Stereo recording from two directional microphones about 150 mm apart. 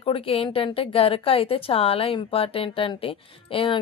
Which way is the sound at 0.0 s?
40° left (ahead or behind).